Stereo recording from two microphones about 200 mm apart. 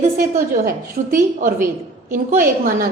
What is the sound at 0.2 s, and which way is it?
A woman's voice, 45° right (ahead or behind).